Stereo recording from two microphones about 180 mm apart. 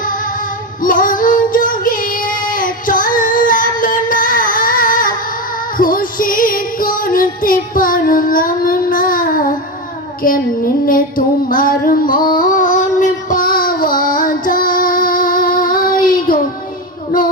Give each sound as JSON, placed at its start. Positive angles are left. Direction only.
{"t": 0.8, "sound": "child singing", "side_deg": 50}
{"t": 5.7, "sound": "music", "side_deg": 50}
{"t": 10.2, "sound": "female singing", "side_deg": 50}
{"t": 11.4, "sound": "female singing", "side_deg": 50}
{"t": 12.3, "sound": "child singing", "side_deg": 50}